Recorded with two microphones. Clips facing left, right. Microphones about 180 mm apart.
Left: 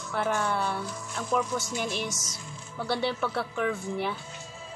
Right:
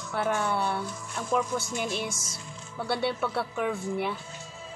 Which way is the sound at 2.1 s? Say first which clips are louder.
Even; 30° right (ahead or behind).